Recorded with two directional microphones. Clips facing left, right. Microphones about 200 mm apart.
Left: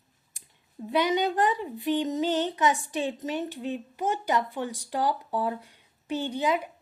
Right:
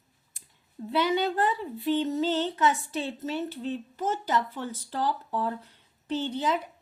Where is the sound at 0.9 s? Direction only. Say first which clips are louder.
Left 1 dB; 15° left (ahead or behind).